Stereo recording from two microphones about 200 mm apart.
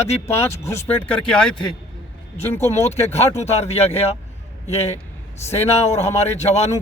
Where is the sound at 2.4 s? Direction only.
10° left (ahead or behind).